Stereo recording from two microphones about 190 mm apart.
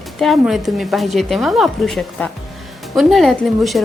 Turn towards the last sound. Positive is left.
turn(degrees=0)  # may be behind; listen again after turning